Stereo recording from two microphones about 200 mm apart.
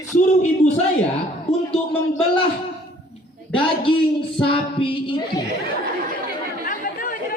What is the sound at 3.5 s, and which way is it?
Speech, 25° left (ahead or behind).